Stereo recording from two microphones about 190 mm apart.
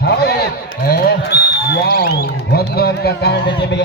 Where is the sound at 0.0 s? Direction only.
55° left (ahead or behind).